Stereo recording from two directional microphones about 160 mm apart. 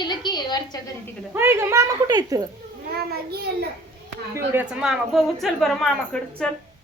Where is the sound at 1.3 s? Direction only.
15° right (ahead or behind).